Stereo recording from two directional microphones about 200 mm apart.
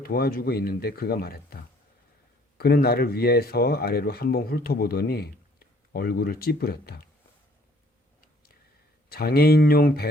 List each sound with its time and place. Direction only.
0.0 s speech: 50° left (ahead or behind)
9.0 s speech: 50° left (ahead or behind)